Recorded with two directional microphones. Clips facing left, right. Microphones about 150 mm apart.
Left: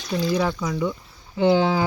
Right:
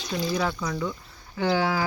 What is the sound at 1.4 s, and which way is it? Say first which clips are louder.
Speech: left 6 dB; 20° left (ahead or behind).